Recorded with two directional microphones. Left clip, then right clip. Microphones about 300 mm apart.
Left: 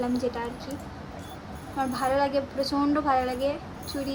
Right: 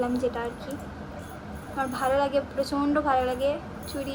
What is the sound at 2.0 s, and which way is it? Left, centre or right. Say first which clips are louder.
A woman's voice: right 1 dB; centre.